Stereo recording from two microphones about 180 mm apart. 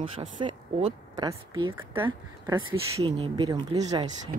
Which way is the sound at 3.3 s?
20° right (ahead or behind).